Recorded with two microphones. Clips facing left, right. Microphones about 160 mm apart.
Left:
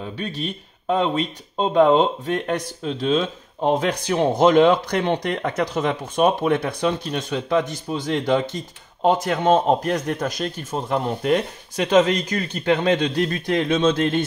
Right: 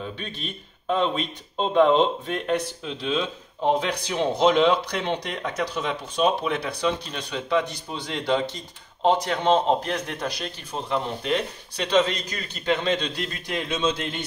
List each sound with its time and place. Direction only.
0.8 s speech: 45° left (ahead or behind)